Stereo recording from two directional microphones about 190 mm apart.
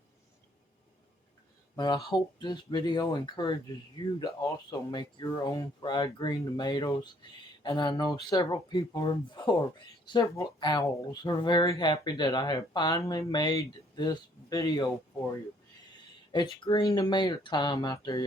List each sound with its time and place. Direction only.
1.7 s speech: 25° left (ahead or behind)
16.6 s speech: 20° left (ahead or behind)